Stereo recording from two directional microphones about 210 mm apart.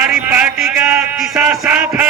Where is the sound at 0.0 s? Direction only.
5° right (ahead or behind).